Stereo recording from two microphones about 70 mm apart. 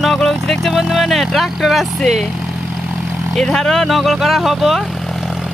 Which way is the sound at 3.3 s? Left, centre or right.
Centre.